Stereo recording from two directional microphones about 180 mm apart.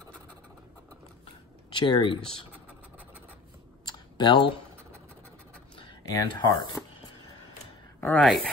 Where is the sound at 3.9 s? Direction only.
25° left (ahead or behind).